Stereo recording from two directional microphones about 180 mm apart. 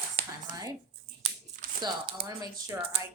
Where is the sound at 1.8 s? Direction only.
25° right (ahead or behind).